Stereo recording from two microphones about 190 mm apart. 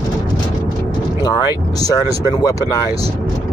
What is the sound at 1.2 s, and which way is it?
Vehicle, 20° left (ahead or behind).